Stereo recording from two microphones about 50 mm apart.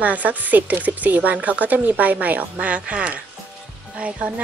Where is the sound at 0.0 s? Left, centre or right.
Right.